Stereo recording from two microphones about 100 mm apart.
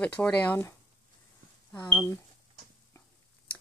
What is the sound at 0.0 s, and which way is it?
Speech, 15° left (ahead or behind).